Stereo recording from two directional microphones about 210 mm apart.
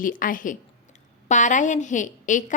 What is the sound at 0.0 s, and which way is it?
A woman's voice, 40° left (ahead or behind).